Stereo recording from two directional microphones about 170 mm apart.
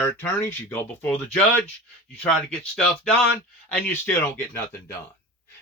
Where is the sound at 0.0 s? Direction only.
10° left (ahead or behind).